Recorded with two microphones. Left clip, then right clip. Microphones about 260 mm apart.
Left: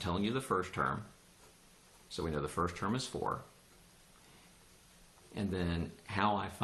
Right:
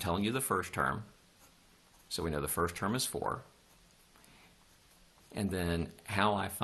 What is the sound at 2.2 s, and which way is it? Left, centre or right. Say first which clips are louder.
Speech: right 2 dB; right.